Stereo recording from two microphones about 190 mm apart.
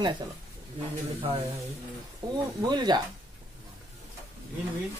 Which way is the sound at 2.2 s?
20° right (ahead or behind).